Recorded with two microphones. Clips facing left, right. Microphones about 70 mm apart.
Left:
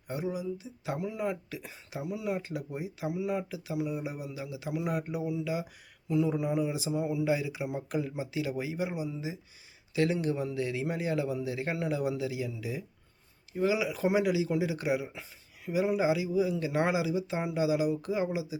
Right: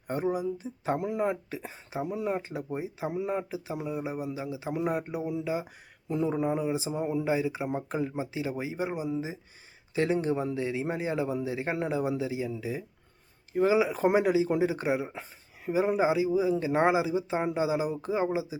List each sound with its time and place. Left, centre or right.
0.1 s a man's voice: right